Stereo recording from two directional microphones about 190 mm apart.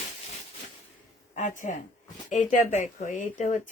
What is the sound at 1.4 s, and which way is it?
Speech, 40° left (ahead or behind).